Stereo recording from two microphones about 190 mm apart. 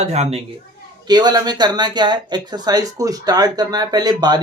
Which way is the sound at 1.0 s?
20° right (ahead or behind).